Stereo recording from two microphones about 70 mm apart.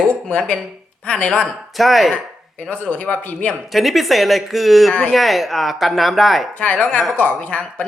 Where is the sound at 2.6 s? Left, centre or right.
Left.